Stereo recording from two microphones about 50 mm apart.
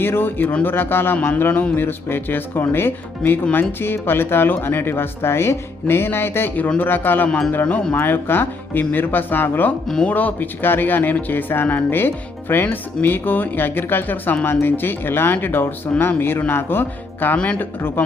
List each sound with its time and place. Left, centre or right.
0.0 s speech: left
7.3 s speech: centre
7.9 s speech: left
17.3 s speech: left
17.6 s speech: left